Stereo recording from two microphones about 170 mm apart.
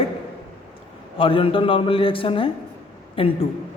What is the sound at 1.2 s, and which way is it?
A man's voice, 30° left (ahead or behind).